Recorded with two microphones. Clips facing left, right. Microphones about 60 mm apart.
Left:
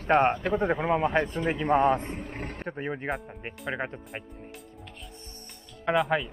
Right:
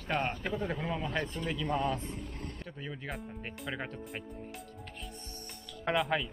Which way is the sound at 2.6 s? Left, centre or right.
Left.